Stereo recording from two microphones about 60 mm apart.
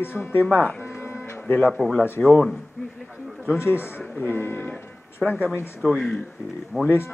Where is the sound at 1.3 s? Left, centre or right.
Left.